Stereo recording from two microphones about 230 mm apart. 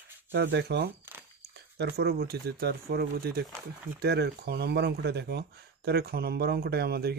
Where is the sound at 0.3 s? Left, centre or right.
Right.